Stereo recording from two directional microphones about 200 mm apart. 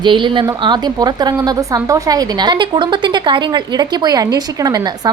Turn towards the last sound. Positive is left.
turn(degrees=-20)  # may be behind; listen again after turning